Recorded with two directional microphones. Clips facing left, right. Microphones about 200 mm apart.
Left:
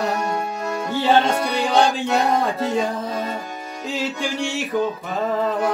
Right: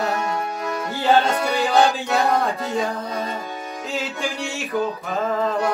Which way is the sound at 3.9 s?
Centre (ahead or behind).